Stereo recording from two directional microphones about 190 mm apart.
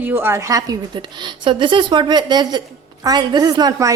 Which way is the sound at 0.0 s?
10° right (ahead or behind).